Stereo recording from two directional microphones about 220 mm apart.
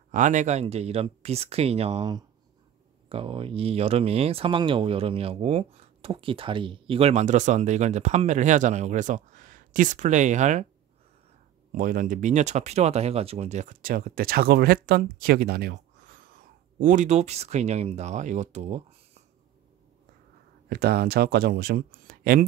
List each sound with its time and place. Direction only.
0.1 s speech: 35° right (ahead or behind)
11.7 s speech: 40° right (ahead or behind)
20.7 s speech: 45° right (ahead or behind)